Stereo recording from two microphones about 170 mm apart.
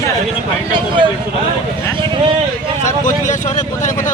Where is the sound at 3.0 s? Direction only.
45° left (ahead or behind).